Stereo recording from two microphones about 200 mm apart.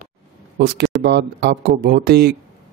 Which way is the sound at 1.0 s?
60° right (ahead or behind).